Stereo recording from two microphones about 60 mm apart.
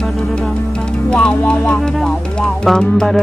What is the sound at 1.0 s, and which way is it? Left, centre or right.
Music, centre.